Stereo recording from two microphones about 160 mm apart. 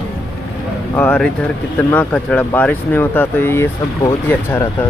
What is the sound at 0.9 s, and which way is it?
Speech, 10° left (ahead or behind).